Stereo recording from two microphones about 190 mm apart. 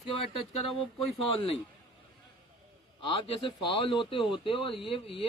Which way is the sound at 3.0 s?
25° left (ahead or behind).